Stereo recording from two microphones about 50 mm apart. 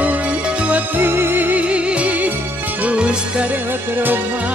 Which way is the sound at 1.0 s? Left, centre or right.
Right.